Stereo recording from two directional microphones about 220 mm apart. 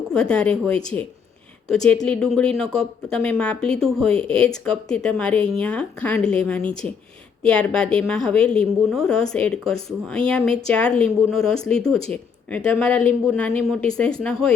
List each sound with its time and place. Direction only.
0.1 s speech: 5° left (ahead or behind)